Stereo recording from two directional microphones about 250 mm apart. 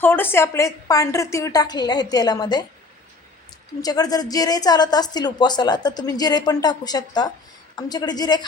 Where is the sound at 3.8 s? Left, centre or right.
Centre.